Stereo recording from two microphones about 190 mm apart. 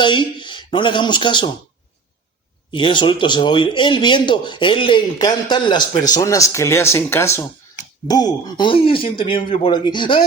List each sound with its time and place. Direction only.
0.0 s speech: 25° left (ahead or behind)
2.7 s speech: 25° left (ahead or behind)